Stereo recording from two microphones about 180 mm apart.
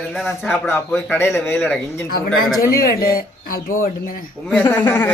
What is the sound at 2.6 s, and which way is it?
Speech, 55° left (ahead or behind).